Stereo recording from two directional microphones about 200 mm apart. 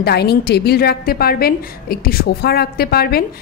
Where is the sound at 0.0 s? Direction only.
55° left (ahead or behind).